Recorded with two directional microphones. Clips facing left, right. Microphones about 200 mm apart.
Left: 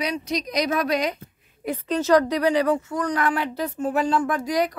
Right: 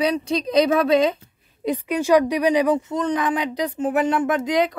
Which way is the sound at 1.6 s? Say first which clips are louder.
Right 2 dB; 15° right (ahead or behind).